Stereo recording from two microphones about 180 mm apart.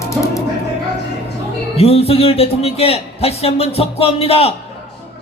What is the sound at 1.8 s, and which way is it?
A man's voice, 35° left (ahead or behind).